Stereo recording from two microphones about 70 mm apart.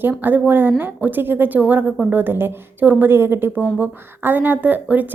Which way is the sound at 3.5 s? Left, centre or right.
Right.